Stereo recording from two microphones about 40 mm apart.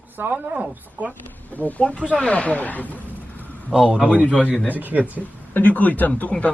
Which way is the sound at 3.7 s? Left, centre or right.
Centre.